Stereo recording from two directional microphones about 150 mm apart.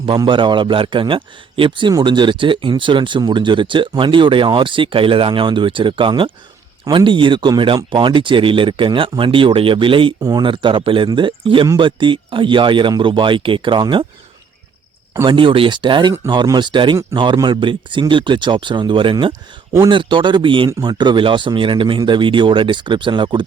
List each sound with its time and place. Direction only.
0.0 s a man's voice: 35° right (ahead or behind)
15.1 s a man's voice: 35° right (ahead or behind)